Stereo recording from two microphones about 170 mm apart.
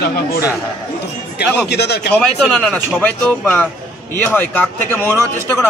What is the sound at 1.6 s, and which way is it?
Speech, 75° left (ahead or behind).